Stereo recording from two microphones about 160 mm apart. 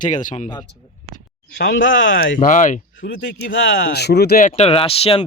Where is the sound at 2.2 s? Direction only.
55° left (ahead or behind).